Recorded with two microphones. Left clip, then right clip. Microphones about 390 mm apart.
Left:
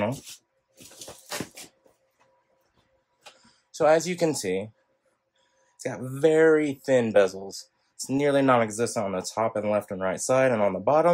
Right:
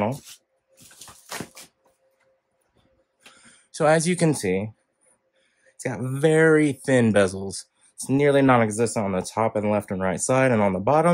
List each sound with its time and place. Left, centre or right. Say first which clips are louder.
0.9 s dog: even; centre
3.4 s speech: right 1 dB; centre
5.8 s speech: right 1 dB; centre